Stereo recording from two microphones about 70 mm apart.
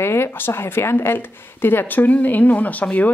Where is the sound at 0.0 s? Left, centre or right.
Left.